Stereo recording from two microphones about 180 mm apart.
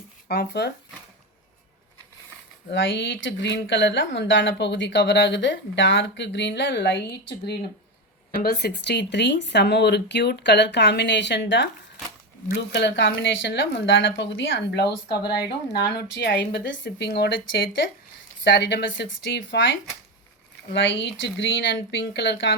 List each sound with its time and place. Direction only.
0.3 s speech: 65° left (ahead or behind)
2.6 s speech: 90° left; by 14.9 s 70° left (ahead or behind)
15.0 s speech: 25° left (ahead or behind)
15.3 s speech: 70° left (ahead or behind); by 19.7 s 90° left
20.7 s speech: 90° left